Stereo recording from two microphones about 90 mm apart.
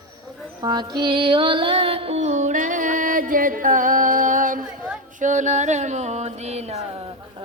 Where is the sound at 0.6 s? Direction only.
50° right (ahead or behind); by 2.1 s 90° right.